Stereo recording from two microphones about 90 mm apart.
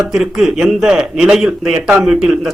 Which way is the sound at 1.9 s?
15° right (ahead or behind).